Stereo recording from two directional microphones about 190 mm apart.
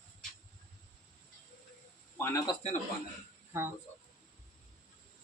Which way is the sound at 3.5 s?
15° right (ahead or behind).